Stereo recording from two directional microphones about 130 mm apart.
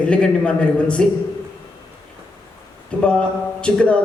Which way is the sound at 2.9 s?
10° left (ahead or behind).